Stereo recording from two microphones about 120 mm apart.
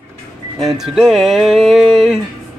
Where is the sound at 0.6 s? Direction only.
Centre (ahead or behind).